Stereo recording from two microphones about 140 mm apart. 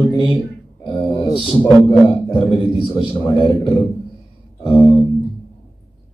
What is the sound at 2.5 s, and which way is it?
A man's voice, 35° left (ahead or behind).